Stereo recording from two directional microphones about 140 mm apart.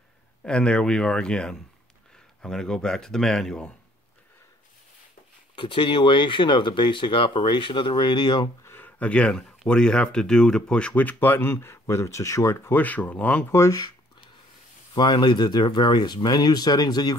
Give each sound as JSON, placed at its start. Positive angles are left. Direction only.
{"t": 0.4, "sound": "speech", "side_deg": 5}
{"t": 5.6, "sound": "speech", "side_deg": 35}
{"t": 8.6, "sound": "speech", "side_deg": 15}
{"t": 15.0, "sound": "speech", "side_deg": 30}